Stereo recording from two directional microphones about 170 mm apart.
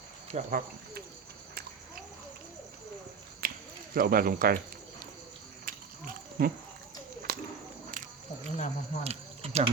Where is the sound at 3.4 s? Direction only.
60° right (ahead or behind).